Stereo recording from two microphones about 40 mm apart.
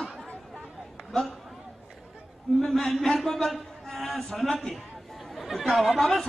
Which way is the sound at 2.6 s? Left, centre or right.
Centre.